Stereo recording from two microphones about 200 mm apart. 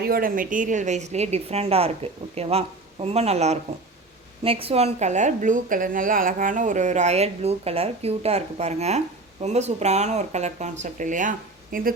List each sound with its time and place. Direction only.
0.0 s a woman's voice: 45° right (ahead or behind)